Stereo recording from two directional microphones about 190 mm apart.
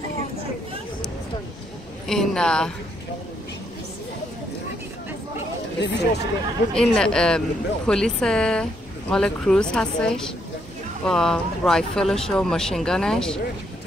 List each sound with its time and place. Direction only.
2.0 s speech: 5° left (ahead or behind)
5.8 s speech: 65° left (ahead or behind)
6.7 s speech: 5° left (ahead or behind)